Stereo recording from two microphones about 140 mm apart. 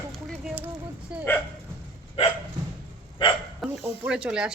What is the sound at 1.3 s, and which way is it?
Speech, 15° left (ahead or behind).